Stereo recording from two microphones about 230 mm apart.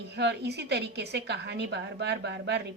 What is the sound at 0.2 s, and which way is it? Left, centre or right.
Speech, right.